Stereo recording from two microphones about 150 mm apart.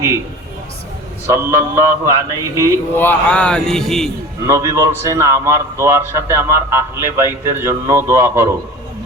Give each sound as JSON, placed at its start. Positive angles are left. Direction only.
{"t": 1.3, "sound": "a man's voice", "side_deg": -20}
{"t": 2.9, "sound": "speech", "side_deg": 15}
{"t": 4.4, "sound": "a man's voice", "side_deg": -20}